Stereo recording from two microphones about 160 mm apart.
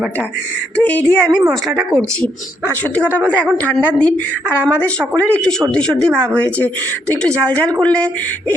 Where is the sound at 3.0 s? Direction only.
10° right (ahead or behind).